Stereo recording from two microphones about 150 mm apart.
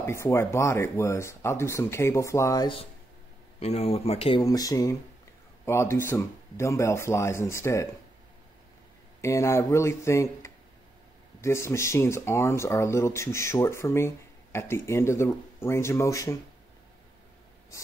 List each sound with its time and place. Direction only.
0.0 s speech: 20° left (ahead or behind)
3.5 s speech: 45° left (ahead or behind)
4.4 s speech: 25° left (ahead or behind)
9.2 s speech: 20° left (ahead or behind)